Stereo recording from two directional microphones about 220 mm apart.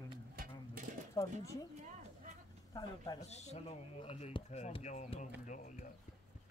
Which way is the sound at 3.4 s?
30° left (ahead or behind).